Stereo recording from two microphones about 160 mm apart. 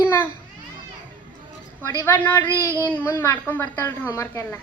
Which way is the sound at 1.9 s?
15° left (ahead or behind).